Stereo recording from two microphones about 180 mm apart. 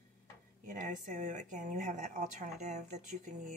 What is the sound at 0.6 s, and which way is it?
Speech, 45° right (ahead or behind).